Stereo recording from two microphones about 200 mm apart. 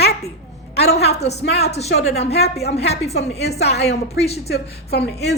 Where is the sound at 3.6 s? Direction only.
55° left (ahead or behind).